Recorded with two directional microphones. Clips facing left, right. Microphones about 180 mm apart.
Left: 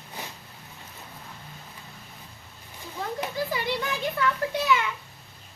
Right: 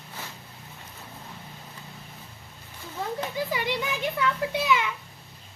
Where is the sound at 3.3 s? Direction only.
15° right (ahead or behind).